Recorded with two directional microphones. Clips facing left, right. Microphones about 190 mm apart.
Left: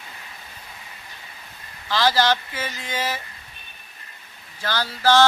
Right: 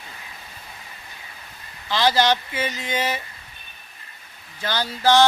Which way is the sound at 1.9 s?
20° right (ahead or behind).